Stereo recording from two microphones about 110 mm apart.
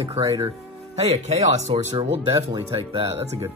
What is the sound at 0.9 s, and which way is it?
Speech, 85° right.